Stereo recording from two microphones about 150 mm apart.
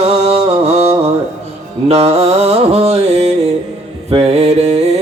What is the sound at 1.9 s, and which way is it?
Mantra, 45° right (ahead or behind).